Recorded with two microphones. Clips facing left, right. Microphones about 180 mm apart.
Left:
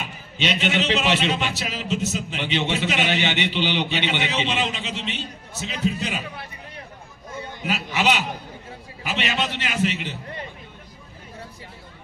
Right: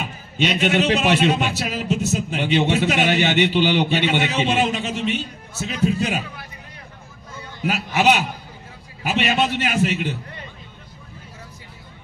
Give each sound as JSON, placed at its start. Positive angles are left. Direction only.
{"t": 0.0, "sound": "a man's voice", "side_deg": -50}
{"t": 7.6, "sound": "a man's voice", "side_deg": -50}